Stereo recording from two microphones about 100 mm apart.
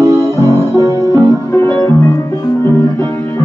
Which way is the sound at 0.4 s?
30° left (ahead or behind).